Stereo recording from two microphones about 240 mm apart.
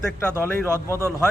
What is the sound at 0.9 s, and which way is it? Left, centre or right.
Speech, centre.